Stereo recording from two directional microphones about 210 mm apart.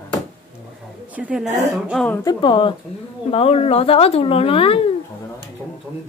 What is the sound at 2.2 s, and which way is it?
Speech, 25° left (ahead or behind).